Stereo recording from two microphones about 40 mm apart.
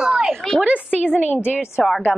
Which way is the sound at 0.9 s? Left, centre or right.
Left.